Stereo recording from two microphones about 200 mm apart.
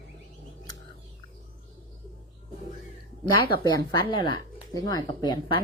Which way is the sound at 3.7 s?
25° left (ahead or behind).